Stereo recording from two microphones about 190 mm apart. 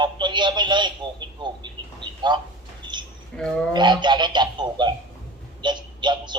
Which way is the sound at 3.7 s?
25° right (ahead or behind).